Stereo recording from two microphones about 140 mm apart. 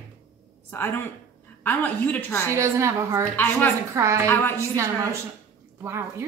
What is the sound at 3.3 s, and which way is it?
Speech, 15° left (ahead or behind).